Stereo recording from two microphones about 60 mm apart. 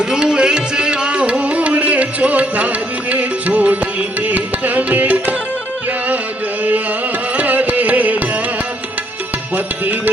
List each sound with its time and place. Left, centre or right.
0.0 s music: centre
6.6 s music: right